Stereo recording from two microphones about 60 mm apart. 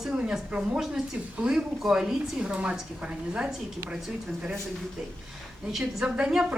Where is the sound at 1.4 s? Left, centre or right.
Centre.